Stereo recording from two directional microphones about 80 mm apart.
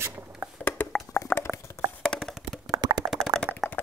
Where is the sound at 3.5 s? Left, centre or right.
Right.